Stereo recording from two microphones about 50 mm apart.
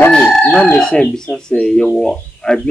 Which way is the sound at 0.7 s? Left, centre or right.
Centre.